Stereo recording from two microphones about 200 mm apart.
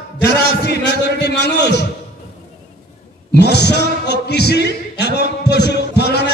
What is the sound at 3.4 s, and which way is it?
Music, 55° left (ahead or behind).